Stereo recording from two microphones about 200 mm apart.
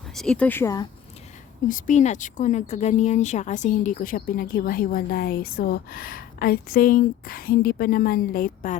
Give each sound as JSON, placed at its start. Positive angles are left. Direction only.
{"t": 0.1, "sound": "speech", "side_deg": 0}
{"t": 1.6, "sound": "speech", "side_deg": 40}